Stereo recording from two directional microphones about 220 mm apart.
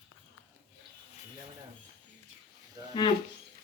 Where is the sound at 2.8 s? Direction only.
20° right (ahead or behind).